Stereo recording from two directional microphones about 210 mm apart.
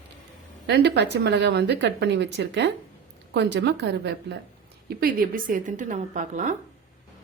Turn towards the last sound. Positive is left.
turn(degrees=-35)  # may be behind; listen again after turning